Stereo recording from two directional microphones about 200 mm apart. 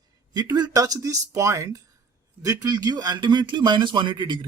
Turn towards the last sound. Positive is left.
turn(degrees=-25)  # may be behind; listen again after turning